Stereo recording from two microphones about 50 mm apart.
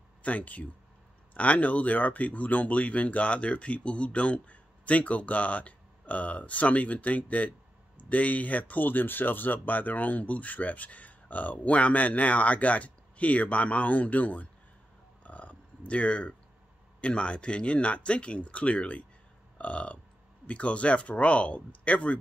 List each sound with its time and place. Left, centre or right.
0.2 s speech: left
15.2 s a sound: left
17.0 s speech: left